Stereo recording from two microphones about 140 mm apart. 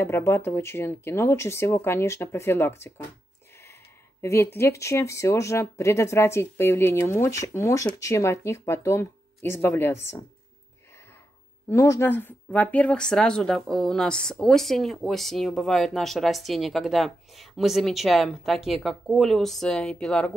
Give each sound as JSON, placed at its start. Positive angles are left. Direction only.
{"t": 0.0, "sound": "speech", "side_deg": 20}
{"t": 4.2, "sound": "speech", "side_deg": 20}
{"t": 11.7, "sound": "speech", "side_deg": 20}